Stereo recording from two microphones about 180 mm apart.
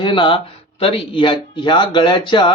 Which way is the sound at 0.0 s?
30° left (ahead or behind).